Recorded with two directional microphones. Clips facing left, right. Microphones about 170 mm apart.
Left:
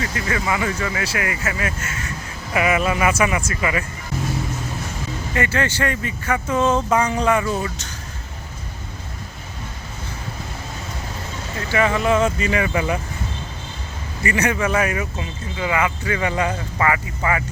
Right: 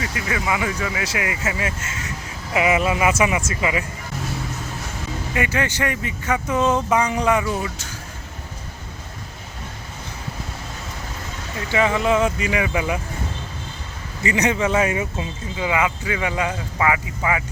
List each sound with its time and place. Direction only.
0.0 s speech: 10° right (ahead or behind)
5.3 s speech: 15° right (ahead or behind)
11.7 s speech: 20° right (ahead or behind)
14.2 s speech: 20° right (ahead or behind)